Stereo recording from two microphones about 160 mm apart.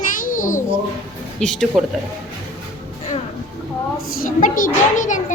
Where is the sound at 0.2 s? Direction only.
60° left (ahead or behind).